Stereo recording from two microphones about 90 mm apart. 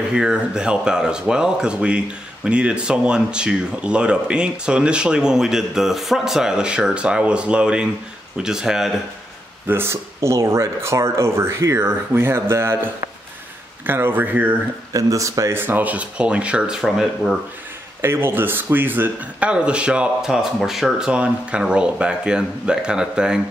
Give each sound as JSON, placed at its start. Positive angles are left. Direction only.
{"t": 0.1, "sound": "a man's voice", "side_deg": -10}
{"t": 9.7, "sound": "speech", "side_deg": -25}
{"t": 13.8, "sound": "speech", "side_deg": -25}
{"t": 14.9, "sound": "speech", "side_deg": -40}
{"t": 18.0, "sound": "a man's voice", "side_deg": -25}